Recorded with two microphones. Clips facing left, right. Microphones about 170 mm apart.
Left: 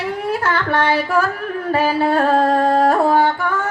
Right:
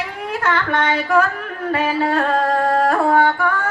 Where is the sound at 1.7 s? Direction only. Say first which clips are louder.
Left 2 dB; 30° left (ahead or behind).